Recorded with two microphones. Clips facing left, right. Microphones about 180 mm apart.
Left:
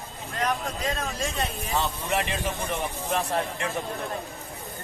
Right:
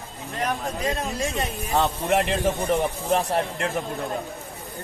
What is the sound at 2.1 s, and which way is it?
Speech, 55° right (ahead or behind).